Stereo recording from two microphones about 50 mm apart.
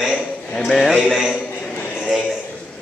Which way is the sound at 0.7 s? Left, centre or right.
Centre.